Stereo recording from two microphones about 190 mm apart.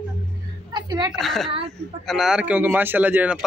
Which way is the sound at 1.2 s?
Centre (ahead or behind).